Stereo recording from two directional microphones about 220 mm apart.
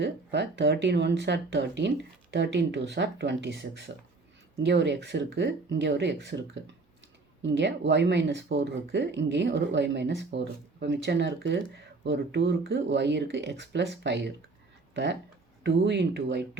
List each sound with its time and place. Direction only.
0.0 s speech: 50° right (ahead or behind)